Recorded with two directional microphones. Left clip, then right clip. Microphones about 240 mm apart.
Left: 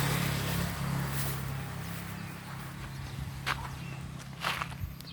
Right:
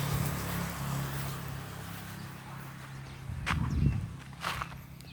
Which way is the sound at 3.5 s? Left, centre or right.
Centre.